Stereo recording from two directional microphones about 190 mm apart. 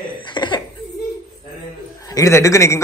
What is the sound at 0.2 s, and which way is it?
Laughter, 25° left (ahead or behind).